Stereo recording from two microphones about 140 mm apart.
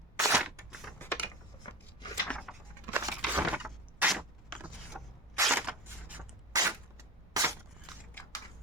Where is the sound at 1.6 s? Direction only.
30° left (ahead or behind).